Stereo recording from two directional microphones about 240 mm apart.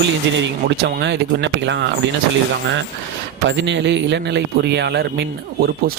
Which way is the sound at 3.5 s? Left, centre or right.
Right.